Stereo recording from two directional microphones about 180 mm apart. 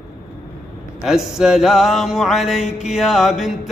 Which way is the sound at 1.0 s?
Centre (ahead or behind).